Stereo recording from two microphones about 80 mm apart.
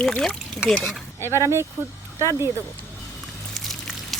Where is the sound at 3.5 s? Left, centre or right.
Centre.